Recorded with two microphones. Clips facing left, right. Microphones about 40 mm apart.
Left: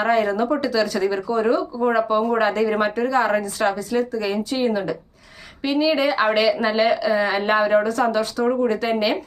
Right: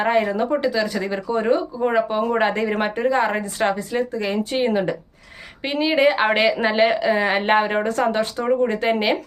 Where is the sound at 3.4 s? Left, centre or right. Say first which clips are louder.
Even; right.